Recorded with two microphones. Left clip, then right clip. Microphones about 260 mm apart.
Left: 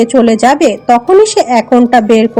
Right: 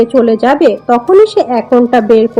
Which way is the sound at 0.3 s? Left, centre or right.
Left.